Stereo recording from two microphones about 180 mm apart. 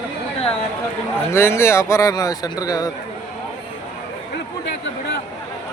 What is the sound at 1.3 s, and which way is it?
Speech, 15° left (ahead or behind).